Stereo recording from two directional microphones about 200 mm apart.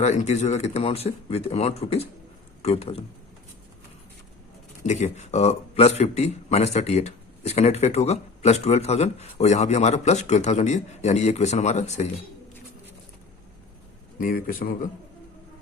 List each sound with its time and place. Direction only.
0.0 s a man's voice: 35° left (ahead or behind)
4.9 s a man's voice: 35° left (ahead or behind)
14.2 s a man's voice: 45° left (ahead or behind)